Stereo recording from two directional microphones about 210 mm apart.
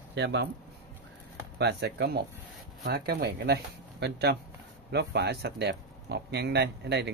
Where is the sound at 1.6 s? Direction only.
55° right (ahead or behind).